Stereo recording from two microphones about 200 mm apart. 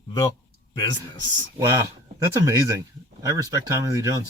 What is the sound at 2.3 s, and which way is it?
Speech, 15° right (ahead or behind).